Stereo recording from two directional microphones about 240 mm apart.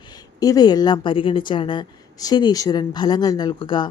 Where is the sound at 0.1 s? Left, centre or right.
Centre.